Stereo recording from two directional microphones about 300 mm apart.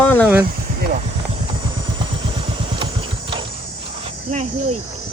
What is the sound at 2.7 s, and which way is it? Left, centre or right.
Vehicle, centre.